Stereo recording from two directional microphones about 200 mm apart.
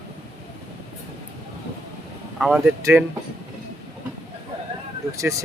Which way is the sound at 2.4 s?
Centre (ahead or behind).